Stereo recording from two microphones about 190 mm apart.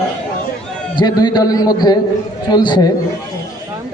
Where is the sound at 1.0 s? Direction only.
20° left (ahead or behind).